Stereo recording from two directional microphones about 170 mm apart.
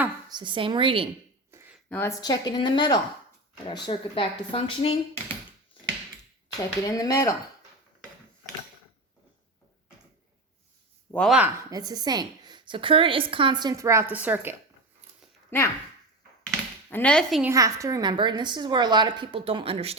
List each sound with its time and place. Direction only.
0.3 s a woman's voice: 25° right (ahead or behind)
1.5 s a sound: 15° right (ahead or behind)
1.9 s a woman's voice: 15° left (ahead or behind); by 4.9 s 35° left (ahead or behind)
6.6 s a woman's voice: 20° left (ahead or behind)
11.1 s speech: 5° left (ahead or behind)
11.7 s a woman's voice: 20° right (ahead or behind)
15.4 s speech: 15° left (ahead or behind)
16.9 s speech: 5° left (ahead or behind)
17.4 s a woman's voice: 20° right (ahead or behind); by 20.0 s 35° right (ahead or behind)